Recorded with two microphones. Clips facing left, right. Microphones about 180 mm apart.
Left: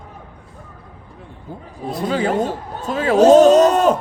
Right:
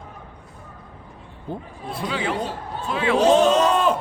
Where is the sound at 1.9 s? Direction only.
40° left (ahead or behind).